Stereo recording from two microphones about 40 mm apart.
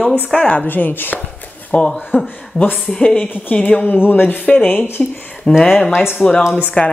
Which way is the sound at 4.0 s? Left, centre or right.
Left.